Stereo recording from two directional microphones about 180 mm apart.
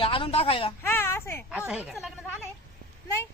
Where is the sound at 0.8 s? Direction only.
10° left (ahead or behind).